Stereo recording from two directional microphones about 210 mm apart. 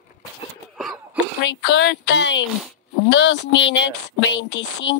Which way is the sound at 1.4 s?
60° left (ahead or behind).